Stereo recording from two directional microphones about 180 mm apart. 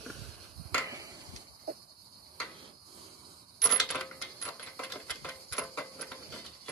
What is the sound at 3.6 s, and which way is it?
Coin, 5° left (ahead or behind).